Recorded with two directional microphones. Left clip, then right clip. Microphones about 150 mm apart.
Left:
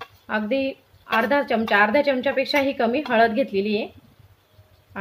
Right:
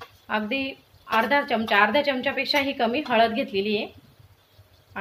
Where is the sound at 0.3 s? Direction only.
60° left (ahead or behind).